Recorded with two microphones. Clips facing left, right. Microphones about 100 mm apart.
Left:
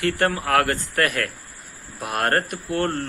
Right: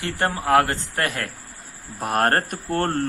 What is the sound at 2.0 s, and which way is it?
Speech, 40° right (ahead or behind).